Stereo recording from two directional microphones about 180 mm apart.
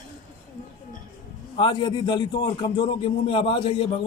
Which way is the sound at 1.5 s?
25° left (ahead or behind).